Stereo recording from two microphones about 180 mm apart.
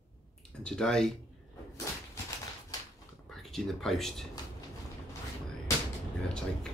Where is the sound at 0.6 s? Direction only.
5° left (ahead or behind).